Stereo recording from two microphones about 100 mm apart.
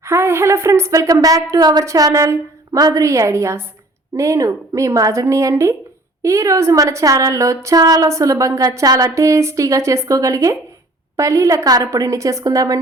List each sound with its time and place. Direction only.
0.0 s a woman's voice: 25° right (ahead or behind)